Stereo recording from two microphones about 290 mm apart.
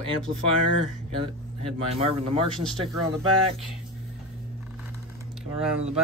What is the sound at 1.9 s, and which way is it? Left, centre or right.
Speech, right.